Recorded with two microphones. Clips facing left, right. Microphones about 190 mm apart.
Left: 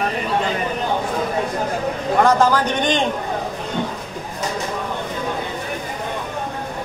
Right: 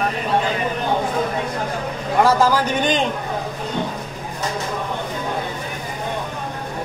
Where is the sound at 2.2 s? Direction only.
5° right (ahead or behind).